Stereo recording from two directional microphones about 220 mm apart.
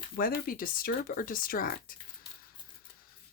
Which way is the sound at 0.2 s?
40° left (ahead or behind).